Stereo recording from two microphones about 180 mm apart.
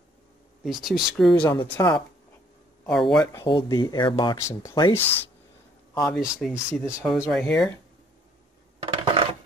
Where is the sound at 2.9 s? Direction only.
Centre (ahead or behind).